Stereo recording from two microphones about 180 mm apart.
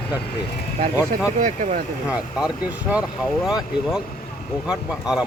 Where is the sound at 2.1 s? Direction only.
5° right (ahead or behind).